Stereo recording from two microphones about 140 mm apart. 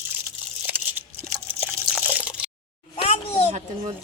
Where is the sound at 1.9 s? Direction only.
10° right (ahead or behind).